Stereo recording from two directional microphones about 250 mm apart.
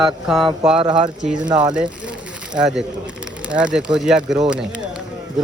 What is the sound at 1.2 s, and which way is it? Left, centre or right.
Speech, centre.